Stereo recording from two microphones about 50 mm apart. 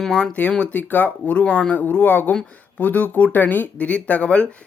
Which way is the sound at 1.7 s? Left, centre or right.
Left.